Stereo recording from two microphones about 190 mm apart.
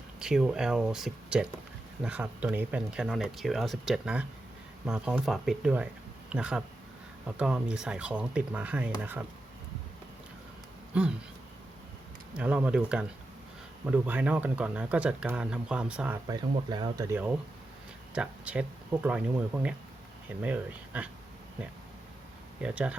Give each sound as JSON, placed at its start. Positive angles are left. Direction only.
{"t": 0.2, "sound": "speech", "side_deg": -5}
{"t": 12.4, "sound": "speech", "side_deg": -5}
{"t": 16.3, "sound": "speech", "side_deg": -20}
{"t": 22.6, "sound": "speech", "side_deg": -5}